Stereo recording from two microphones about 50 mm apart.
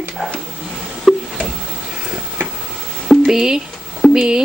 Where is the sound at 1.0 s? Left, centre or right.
Centre.